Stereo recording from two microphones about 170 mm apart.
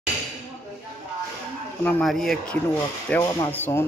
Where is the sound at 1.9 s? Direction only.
5° left (ahead or behind).